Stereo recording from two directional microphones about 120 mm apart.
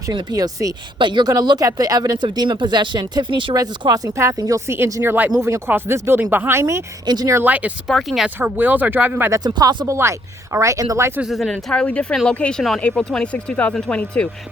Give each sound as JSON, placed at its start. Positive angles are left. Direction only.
{"t": 0.1, "sound": "speech", "side_deg": -35}
{"t": 7.0, "sound": "speech", "side_deg": -35}
{"t": 7.3, "sound": "speech", "side_deg": -15}
{"t": 7.9, "sound": "speech", "side_deg": 0}
{"t": 8.4, "sound": "speech", "side_deg": -15}
{"t": 9.4, "sound": "speech", "side_deg": -35}
{"t": 9.8, "sound": "speech", "side_deg": -25}
{"t": 11.2, "sound": "speech", "side_deg": 0}